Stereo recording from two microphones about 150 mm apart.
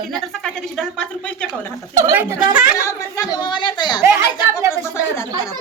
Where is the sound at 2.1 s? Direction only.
15° right (ahead or behind).